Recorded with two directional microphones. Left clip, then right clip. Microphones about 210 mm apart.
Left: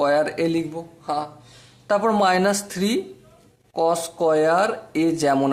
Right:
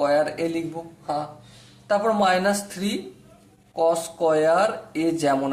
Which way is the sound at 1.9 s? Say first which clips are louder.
Left 1 dB; 35° left (ahead or behind).